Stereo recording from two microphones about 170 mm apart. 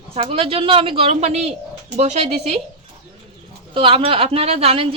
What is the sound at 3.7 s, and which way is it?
Speech, 35° right (ahead or behind).